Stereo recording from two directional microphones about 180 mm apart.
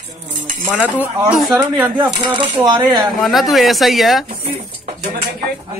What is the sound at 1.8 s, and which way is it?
Speech, 25° right (ahead or behind).